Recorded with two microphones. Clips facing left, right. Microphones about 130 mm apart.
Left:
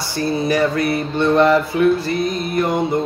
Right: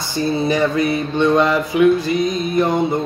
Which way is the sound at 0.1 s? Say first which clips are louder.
Right 1 dB; 20° right (ahead or behind).